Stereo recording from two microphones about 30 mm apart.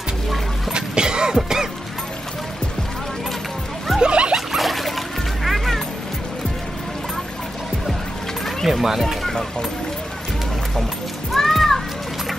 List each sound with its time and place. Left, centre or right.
0.7 s a sound: right
4.0 s zipper: right
4.5 s music: centre
8.6 s speech: centre
9.0 s speech: centre
11.3 s children playing: centre